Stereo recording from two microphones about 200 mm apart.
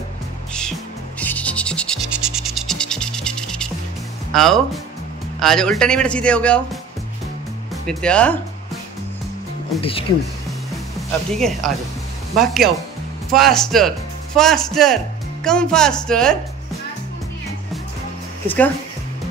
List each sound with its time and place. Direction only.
1.2 s music: 10° left (ahead or behind)
4.3 s speech: centre (ahead or behind)
9.8 s speech: 25° left (ahead or behind)
11.0 s speech: centre (ahead or behind)